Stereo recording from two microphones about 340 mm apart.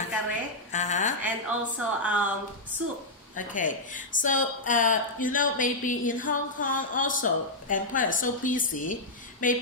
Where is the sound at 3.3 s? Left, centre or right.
Left.